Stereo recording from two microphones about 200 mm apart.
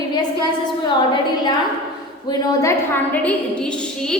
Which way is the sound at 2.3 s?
15° left (ahead or behind).